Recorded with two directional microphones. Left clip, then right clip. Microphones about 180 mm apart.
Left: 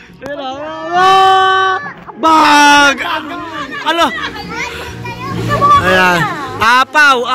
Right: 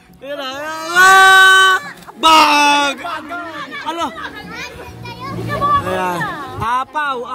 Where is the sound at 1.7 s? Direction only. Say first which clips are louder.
Right 1 dB; 10° right (ahead or behind).